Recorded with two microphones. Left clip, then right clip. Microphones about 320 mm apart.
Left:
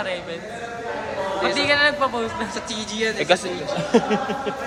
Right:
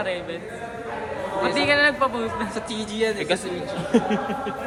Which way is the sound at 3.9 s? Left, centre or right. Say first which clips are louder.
Left 2 dB; centre.